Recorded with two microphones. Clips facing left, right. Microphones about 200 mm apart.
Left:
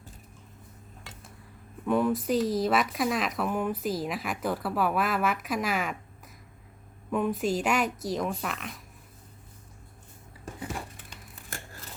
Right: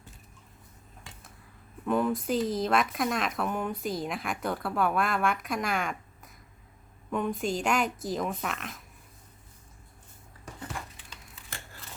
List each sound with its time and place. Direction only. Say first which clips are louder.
1.9 s speech: left 2 dB; centre (ahead or behind)